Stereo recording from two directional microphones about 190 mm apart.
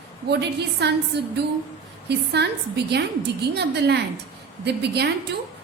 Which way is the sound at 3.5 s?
60° right (ahead or behind).